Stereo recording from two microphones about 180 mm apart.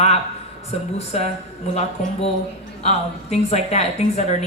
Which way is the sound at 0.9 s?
35° left (ahead or behind).